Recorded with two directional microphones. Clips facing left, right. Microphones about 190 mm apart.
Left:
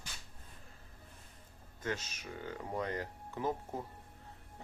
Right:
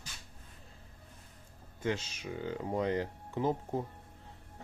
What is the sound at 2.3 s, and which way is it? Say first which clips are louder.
Speech: right 6 dB; 15° right (ahead or behind).